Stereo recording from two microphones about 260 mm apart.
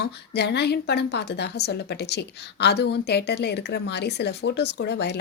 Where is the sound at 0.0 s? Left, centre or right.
Left.